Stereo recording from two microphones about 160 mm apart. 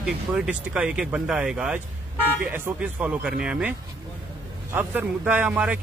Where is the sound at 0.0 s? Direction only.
5° right (ahead or behind).